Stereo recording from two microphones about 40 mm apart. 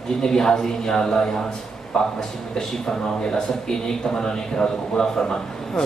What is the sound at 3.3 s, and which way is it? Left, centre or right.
A man's voice, centre.